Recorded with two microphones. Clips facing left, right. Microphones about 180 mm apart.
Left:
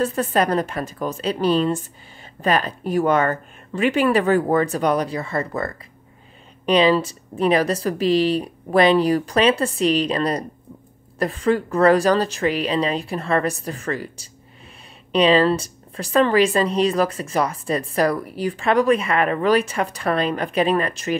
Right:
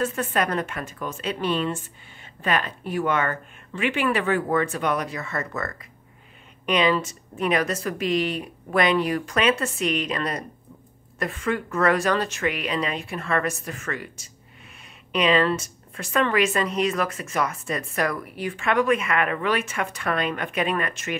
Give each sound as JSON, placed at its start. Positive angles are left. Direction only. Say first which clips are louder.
{"t": 0.0, "sound": "speech", "louder": "left 5 dB", "side_deg": 35}